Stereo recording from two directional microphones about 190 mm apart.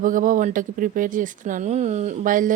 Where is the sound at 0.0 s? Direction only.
45° right (ahead or behind).